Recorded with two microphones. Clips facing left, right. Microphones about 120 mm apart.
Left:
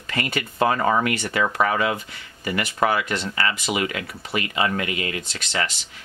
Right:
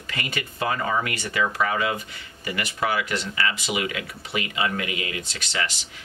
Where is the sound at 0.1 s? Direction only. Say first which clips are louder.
Left 5 dB; 35° left (ahead or behind).